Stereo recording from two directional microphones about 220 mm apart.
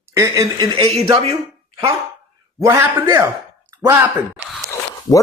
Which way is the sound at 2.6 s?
15° right (ahead or behind).